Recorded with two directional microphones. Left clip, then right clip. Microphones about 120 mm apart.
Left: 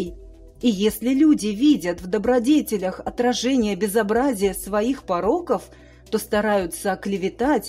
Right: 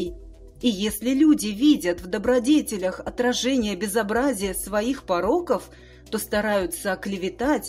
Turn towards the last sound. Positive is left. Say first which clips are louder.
# left 3 dB
turn(degrees=45)  # may be behind; listen again after turning